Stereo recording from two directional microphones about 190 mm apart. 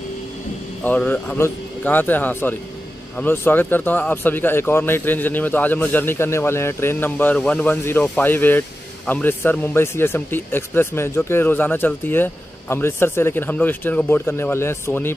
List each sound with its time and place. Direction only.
0.8 s speech: 10° left (ahead or behind)